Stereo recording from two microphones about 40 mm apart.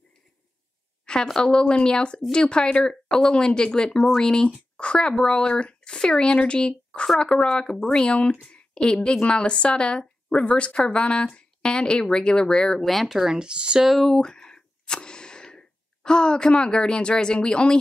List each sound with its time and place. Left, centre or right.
1.0 s speech: centre
12.8 s speech: centre; by 13.8 s right
13.8 s speech: centre
14.1 s a sound: centre